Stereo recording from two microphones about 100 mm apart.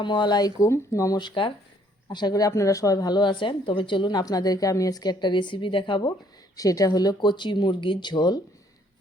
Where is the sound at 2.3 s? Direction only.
35° left (ahead or behind); by 6.1 s 55° left (ahead or behind).